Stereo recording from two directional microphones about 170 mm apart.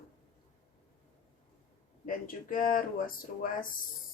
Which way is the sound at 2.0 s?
55° left (ahead or behind).